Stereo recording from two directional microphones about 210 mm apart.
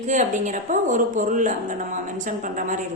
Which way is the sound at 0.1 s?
35° right (ahead or behind).